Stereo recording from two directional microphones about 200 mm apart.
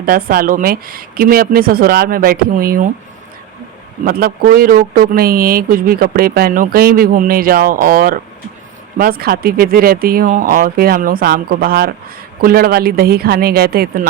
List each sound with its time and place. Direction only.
0.0 s speech: 45° right (ahead or behind)
4.0 s speech: 45° right (ahead or behind)